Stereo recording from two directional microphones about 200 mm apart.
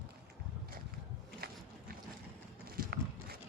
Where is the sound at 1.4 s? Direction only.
50° right (ahead or behind).